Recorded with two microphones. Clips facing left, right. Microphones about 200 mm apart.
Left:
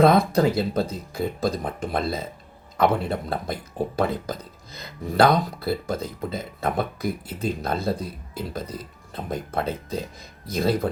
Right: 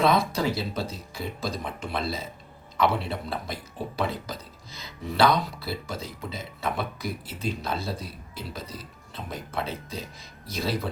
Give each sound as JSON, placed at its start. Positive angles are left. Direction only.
{"t": 0.0, "sound": "speech", "side_deg": 55}